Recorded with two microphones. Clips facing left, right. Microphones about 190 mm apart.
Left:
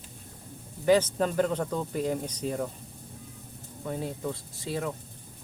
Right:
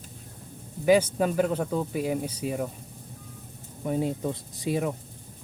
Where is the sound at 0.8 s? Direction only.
10° right (ahead or behind).